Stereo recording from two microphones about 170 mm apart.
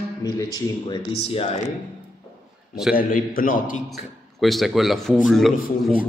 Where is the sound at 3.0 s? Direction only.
55° left (ahead or behind).